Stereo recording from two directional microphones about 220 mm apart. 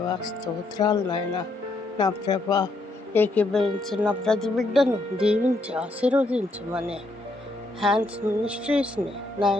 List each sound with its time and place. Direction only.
0.1 s a woman's voice: 20° left (ahead or behind); by 6.2 s 5° right (ahead or behind)
7.8 s a woman's voice: centre (ahead or behind)